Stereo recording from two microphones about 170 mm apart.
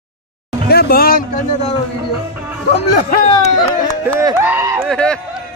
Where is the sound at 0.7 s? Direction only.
65° left (ahead or behind).